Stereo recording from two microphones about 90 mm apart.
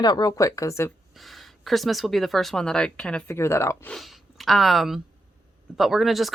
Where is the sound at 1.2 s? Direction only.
Centre (ahead or behind).